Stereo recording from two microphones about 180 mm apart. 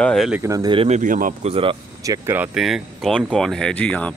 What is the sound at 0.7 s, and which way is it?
Speech, 40° right (ahead or behind).